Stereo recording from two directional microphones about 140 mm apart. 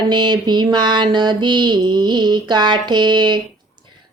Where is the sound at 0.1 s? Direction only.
30° right (ahead or behind).